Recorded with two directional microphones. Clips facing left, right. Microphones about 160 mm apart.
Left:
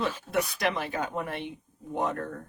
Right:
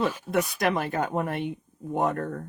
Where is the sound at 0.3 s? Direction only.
50° right (ahead or behind).